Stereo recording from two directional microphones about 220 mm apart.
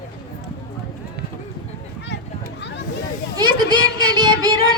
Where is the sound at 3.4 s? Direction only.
20° right (ahead or behind).